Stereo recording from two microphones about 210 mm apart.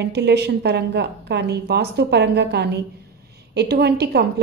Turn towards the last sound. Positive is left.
turn(degrees=-50)  # may be behind; listen again after turning